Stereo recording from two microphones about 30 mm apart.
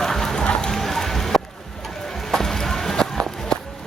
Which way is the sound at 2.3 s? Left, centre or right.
Centre.